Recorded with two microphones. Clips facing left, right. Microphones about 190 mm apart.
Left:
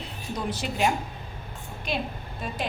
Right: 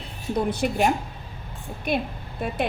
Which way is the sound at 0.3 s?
55° right (ahead or behind).